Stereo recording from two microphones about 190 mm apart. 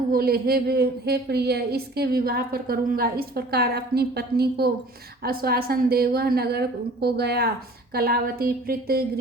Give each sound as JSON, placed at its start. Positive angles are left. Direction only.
{"t": 0.1, "sound": "a woman's voice", "side_deg": -50}